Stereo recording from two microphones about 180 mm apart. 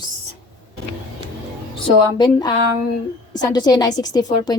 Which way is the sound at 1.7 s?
25° left (ahead or behind).